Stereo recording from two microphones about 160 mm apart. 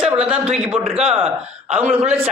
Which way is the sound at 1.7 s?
10° right (ahead or behind).